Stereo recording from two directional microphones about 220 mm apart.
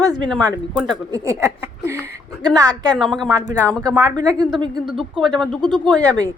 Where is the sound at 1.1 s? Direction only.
15° right (ahead or behind).